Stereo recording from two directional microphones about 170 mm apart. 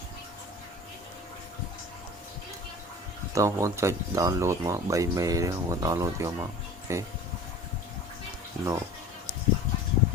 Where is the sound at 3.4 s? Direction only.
15° right (ahead or behind).